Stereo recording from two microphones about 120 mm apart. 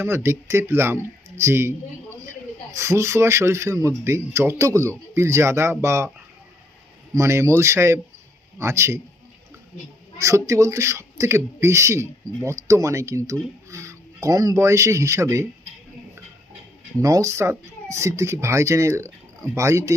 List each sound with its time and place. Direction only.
0.0 s speech: 20° right (ahead or behind)
7.1 s speech: 25° right (ahead or behind)
10.2 s speech: 25° right (ahead or behind)
17.0 s speech: 25° right (ahead or behind)